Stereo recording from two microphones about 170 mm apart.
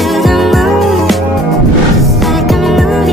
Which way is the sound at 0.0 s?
Centre (ahead or behind).